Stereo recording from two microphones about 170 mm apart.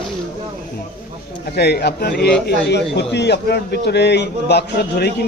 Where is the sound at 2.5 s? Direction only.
80° left.